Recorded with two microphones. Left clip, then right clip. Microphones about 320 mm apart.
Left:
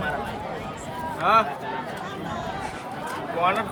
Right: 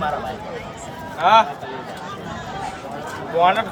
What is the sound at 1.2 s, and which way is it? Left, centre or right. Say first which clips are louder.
Speech: right 6 dB; right.